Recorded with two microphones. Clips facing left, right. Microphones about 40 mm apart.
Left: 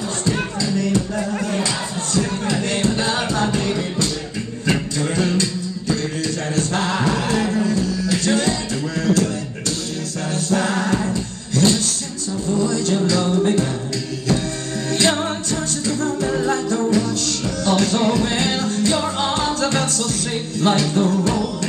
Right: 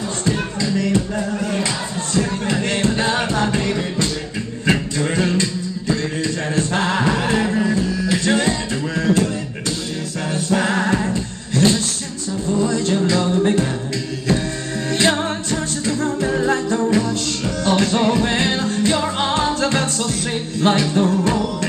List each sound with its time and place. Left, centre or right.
0.6 s music: right
10.3 s music: right
11.5 s a sound: right
12.5 s music: right
14.9 s music: right